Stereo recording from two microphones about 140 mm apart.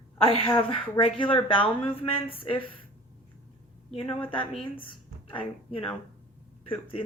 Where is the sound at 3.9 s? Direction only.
40° left (ahead or behind).